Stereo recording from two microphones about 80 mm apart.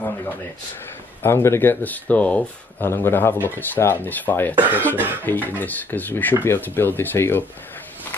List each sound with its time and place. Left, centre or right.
0.0 s a sound: left
1.2 s speech: left; by 2.4 s centre
2.8 s speech: left
4.6 s speech: right
5.2 s speech: left